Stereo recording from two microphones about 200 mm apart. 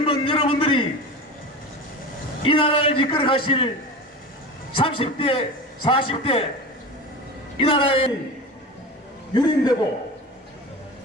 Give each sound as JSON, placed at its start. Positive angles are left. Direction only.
{"t": 0.0, "sound": "a sound", "side_deg": 25}
{"t": 2.4, "sound": "a man's voice", "side_deg": 25}
{"t": 4.7, "sound": "a man's voice", "side_deg": 25}
{"t": 7.6, "sound": "a man's voice", "side_deg": 25}
{"t": 9.3, "sound": "a man's voice", "side_deg": 20}